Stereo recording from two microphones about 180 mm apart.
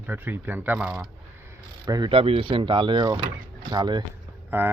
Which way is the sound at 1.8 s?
20° right (ahead or behind).